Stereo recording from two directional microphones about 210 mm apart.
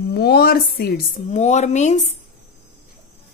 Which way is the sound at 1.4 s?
35° left (ahead or behind).